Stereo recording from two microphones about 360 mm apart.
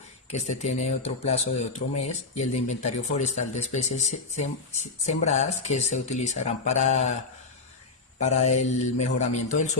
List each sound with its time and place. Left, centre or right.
0.3 s speech: centre
8.2 s speech: centre